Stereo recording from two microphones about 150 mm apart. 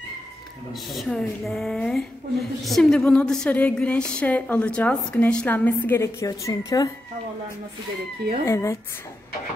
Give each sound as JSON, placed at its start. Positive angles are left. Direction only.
{"t": 0.9, "sound": "a woman's voice", "side_deg": 0}
{"t": 8.5, "sound": "speech", "side_deg": 20}